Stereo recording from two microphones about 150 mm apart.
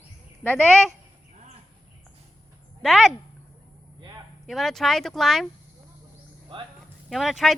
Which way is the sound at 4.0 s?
30° right (ahead or behind).